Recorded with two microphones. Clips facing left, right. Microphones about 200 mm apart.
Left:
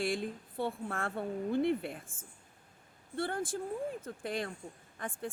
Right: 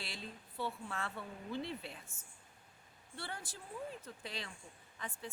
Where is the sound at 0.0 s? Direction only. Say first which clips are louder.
Left 14 dB; 50° left (ahead or behind).